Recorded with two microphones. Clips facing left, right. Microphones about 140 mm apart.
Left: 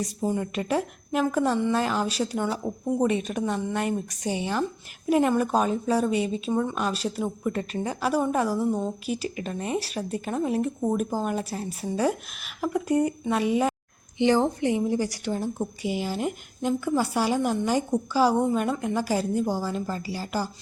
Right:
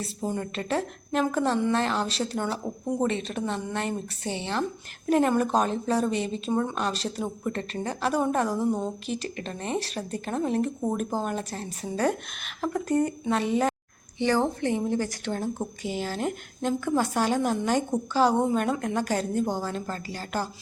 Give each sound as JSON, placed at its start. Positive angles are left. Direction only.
{"t": 0.2, "sound": "a woman's voice", "side_deg": 5}